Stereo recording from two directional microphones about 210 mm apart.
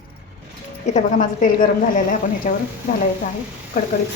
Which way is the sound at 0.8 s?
35° left (ahead or behind).